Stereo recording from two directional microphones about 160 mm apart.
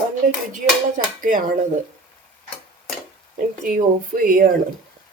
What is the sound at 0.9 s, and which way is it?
Speech, 55° right (ahead or behind).